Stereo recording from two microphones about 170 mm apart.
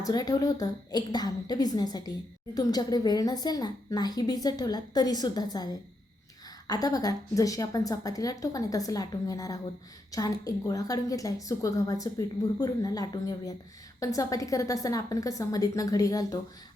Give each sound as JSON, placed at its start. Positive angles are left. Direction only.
{"t": 0.0, "sound": "a woman's voice", "side_deg": 20}
{"t": 6.7, "sound": "a woman's voice", "side_deg": 20}